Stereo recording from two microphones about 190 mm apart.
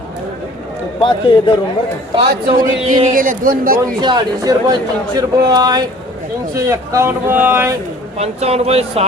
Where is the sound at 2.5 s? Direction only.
45° right (ahead or behind).